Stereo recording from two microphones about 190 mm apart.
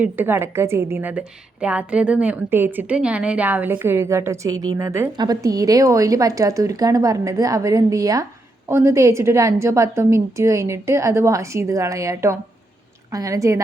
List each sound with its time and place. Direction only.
0.0 s a woman's voice: 10° right (ahead or behind)